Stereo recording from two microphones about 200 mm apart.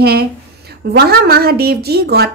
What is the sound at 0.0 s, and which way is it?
A woman's voice, 55° right (ahead or behind).